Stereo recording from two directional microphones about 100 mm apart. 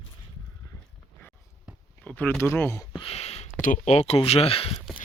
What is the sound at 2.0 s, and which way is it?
Speech, 20° left (ahead or behind).